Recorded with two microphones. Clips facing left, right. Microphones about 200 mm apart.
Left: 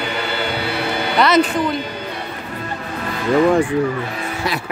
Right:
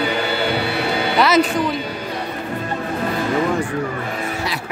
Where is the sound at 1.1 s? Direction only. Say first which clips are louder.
Left 1 dB; centre (ahead or behind).